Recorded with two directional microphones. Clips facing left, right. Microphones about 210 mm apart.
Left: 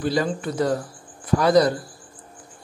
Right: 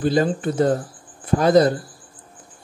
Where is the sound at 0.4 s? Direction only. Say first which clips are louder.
Right 4 dB; 25° right (ahead or behind).